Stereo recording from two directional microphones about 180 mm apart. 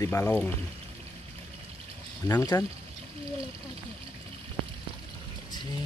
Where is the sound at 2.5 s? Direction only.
20° left (ahead or behind).